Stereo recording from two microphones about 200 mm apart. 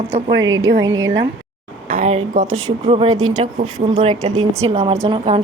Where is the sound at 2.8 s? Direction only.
30° right (ahead or behind).